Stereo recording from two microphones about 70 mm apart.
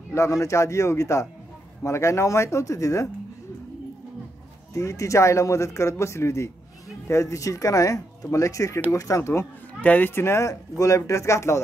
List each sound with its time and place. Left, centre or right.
0.1 s speech: left
4.7 s speech: left
9.8 s speech: left
10.5 s speech: left